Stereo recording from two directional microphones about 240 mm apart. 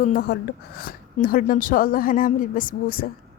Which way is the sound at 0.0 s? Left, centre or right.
Left.